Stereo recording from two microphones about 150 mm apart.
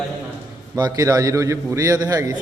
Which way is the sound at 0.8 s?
25° right (ahead or behind).